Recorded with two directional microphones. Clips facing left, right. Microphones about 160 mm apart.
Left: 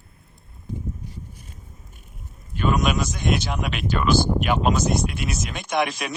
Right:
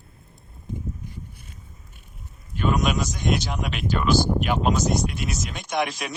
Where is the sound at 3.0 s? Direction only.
65° left (ahead or behind).